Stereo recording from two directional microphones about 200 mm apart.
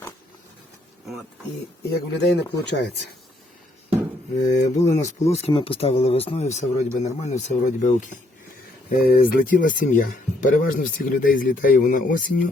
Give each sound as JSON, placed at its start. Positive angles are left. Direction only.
{"t": 2.1, "sound": "speech", "side_deg": 60}
{"t": 4.4, "sound": "speech", "side_deg": 35}
{"t": 9.0, "sound": "speech", "side_deg": 50}